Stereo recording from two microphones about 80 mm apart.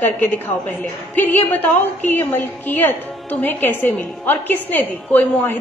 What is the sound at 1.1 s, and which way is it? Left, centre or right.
A woman's voice, left.